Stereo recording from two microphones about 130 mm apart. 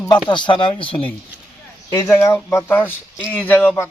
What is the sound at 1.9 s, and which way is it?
Speech, 25° left (ahead or behind).